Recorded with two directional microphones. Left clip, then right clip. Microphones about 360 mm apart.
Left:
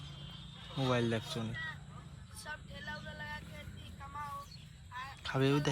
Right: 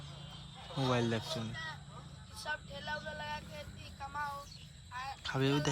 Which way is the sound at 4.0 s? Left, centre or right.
Centre.